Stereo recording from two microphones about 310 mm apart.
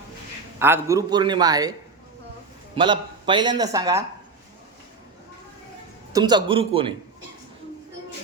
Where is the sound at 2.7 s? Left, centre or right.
Centre.